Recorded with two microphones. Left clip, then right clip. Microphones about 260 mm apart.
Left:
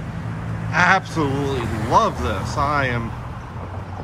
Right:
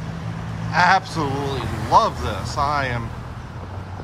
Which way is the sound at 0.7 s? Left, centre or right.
Centre.